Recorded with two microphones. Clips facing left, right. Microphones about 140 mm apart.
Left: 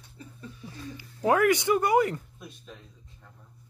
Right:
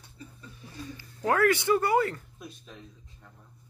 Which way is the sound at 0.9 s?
15° left (ahead or behind).